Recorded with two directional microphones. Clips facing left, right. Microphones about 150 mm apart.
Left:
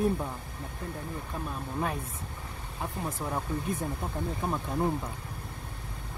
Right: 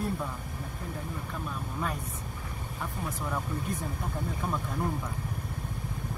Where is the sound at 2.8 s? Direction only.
25° left (ahead or behind).